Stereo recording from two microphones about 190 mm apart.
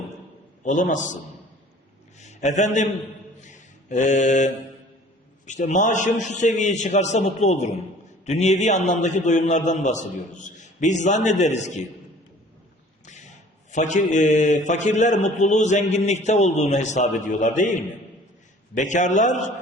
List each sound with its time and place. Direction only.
0.6 s a man's voice: 40° left (ahead or behind)
2.1 s a sound: 40° left (ahead or behind)
3.4 s a man's voice: 40° left (ahead or behind)
13.1 s a man's voice: 40° left (ahead or behind)
18.8 s a man's voice: 40° left (ahead or behind)